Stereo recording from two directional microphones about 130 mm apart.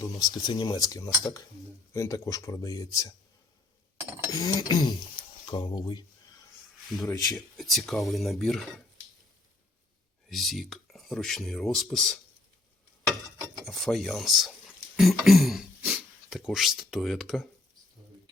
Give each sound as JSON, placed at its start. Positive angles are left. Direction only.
{"t": 0.0, "sound": "speech", "side_deg": 30}
{"t": 4.3, "sound": "speech", "side_deg": 30}
{"t": 6.8, "sound": "speech", "side_deg": 0}
{"t": 10.2, "sound": "speech", "side_deg": 0}
{"t": 13.7, "sound": "speech", "side_deg": 0}